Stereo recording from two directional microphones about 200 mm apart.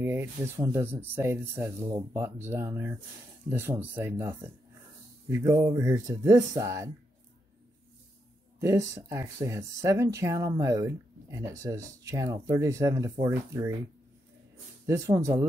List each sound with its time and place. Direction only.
0.0 s speech: 10° right (ahead or behind)
8.5 s speech: 15° right (ahead or behind)
14.9 s speech: 15° right (ahead or behind)